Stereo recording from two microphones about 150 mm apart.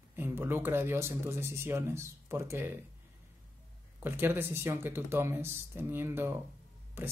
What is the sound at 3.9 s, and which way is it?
Speech, 15° right (ahead or behind).